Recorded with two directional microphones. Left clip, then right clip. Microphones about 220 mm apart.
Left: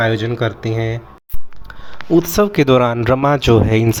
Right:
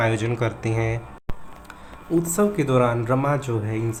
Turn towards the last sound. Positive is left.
turn(degrees=45)  # may be behind; listen again after turning